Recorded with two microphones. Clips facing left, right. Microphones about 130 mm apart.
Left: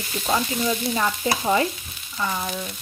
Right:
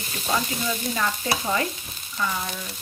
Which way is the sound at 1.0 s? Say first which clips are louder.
Left 3 dB; 20° left (ahead or behind).